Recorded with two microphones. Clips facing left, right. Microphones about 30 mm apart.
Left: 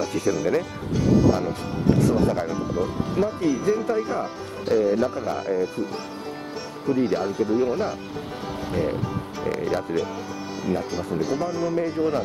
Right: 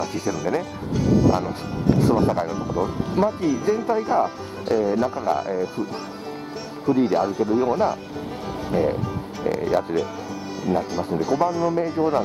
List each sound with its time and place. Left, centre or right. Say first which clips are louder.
0.0 s speech: left 2 dB; centre
6.9 s speech: right 3 dB; centre
8.9 s music: even; centre
10.6 s speech: right 3 dB; centre